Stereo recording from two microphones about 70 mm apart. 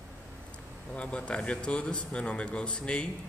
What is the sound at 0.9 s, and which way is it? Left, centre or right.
A man's voice, centre.